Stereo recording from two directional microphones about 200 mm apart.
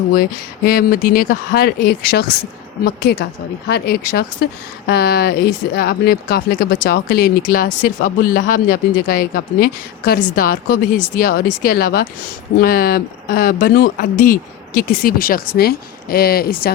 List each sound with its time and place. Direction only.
0.1 s a woman's voice: 45° left (ahead or behind)